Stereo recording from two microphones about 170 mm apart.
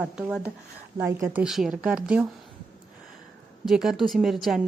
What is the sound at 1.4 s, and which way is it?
Speech, centre (ahead or behind).